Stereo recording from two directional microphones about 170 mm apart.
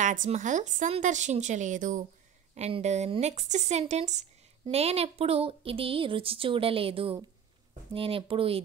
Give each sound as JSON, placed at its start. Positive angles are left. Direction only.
{"t": 0.0, "sound": "speech", "side_deg": -50}